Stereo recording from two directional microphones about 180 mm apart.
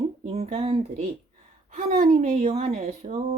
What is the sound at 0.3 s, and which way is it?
A woman's voice, 35° right (ahead or behind).